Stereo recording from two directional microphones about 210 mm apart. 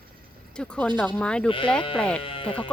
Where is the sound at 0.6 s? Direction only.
5° left (ahead or behind).